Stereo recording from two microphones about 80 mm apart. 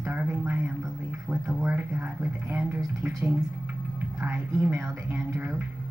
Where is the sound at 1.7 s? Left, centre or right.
Right.